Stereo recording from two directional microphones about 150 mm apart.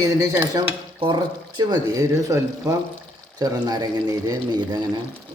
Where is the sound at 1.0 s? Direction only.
30° right (ahead or behind).